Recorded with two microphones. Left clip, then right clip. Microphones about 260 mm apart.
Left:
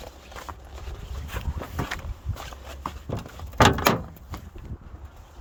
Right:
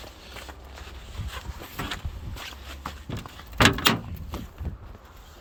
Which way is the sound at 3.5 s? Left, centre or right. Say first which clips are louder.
Left 1 dB; left.